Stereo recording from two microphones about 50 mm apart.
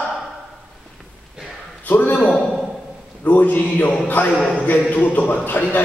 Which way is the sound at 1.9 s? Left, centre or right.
Left.